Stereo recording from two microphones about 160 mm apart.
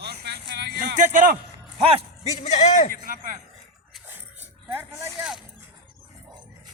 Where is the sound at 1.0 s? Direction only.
50° right (ahead or behind).